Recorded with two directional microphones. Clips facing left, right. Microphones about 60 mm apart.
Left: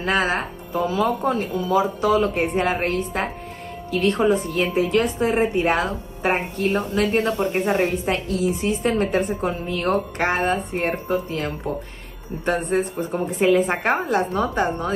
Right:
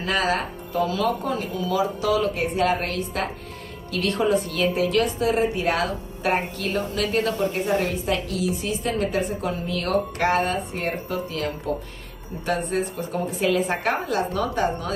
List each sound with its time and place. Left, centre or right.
0.0 s speech: left
0.7 s a woman's voice: left
1.6 s a woman's voice: left
7.3 s a woman's voice: left
9.7 s speech: left
12.4 s a woman's voice: left
12.9 s a woman's voice: left